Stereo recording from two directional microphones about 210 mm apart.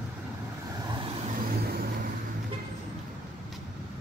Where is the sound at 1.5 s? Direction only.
45° right (ahead or behind).